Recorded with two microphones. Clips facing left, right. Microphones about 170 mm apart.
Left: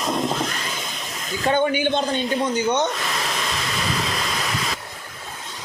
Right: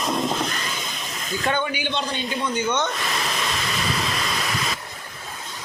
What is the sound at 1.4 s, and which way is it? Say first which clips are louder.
Speech: left 6 dB; 40° left (ahead or behind).